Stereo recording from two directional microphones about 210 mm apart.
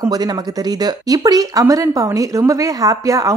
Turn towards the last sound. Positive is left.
turn(degrees=-15)  # may be behind; listen again after turning